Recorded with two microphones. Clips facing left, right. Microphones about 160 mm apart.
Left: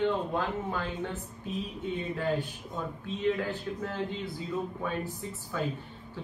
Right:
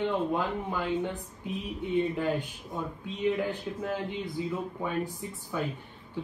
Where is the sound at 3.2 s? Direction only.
15° right (ahead or behind).